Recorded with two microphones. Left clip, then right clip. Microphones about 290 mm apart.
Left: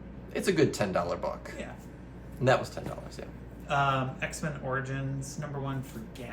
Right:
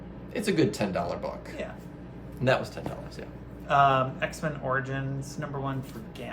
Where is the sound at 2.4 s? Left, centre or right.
Centre.